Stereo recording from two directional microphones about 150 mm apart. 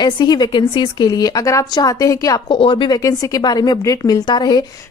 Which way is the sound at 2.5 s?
35° left (ahead or behind).